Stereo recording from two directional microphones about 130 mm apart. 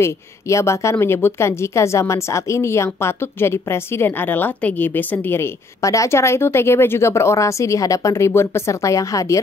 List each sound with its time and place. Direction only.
0.0 s a woman's voice: 20° left (ahead or behind)